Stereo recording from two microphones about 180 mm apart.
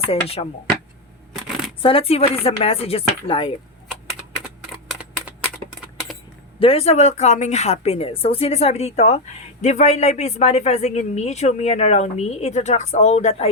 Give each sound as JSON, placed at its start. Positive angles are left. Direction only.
{"t": 0.0, "sound": "a woman's voice", "side_deg": 30}
{"t": 1.8, "sound": "a woman's voice", "side_deg": 30}
{"t": 6.6, "sound": "a woman's voice", "side_deg": 30}